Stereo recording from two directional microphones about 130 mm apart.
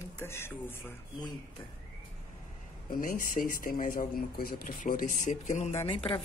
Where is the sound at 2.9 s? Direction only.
90° left; by 5.7 s 65° left (ahead or behind).